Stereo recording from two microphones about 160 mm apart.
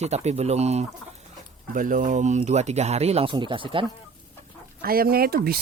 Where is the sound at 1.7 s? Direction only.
55° right (ahead or behind); by 3.8 s 30° right (ahead or behind).